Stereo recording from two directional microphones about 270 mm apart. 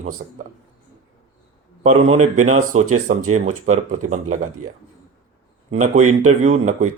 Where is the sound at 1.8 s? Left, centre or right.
Right.